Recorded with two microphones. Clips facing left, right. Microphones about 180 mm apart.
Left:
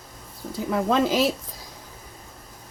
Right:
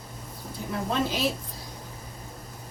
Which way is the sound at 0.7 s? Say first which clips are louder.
Left 7 dB; 90° left.